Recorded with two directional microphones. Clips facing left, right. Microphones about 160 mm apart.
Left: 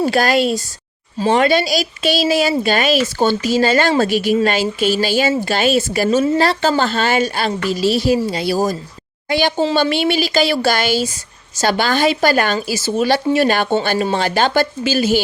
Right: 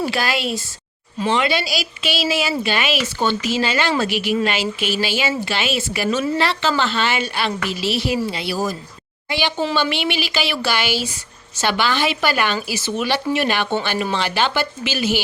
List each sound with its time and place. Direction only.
0.0 s a woman's voice: 45° left (ahead or behind)
9.7 s a woman's voice: 40° left (ahead or behind)